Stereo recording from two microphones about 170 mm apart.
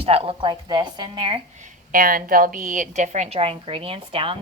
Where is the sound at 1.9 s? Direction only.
55° right (ahead or behind).